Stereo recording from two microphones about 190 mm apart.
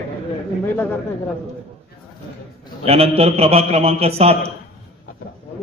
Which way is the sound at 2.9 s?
30° right (ahead or behind).